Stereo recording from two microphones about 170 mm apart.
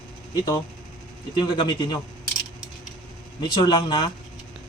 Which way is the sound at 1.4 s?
25° left (ahead or behind).